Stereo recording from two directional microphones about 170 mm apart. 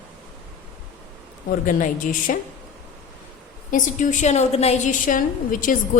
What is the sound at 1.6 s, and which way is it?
Speech, 50° left (ahead or behind).